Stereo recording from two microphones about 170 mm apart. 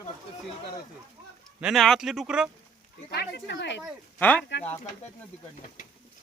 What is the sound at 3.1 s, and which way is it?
Speech, 75° left (ahead or behind).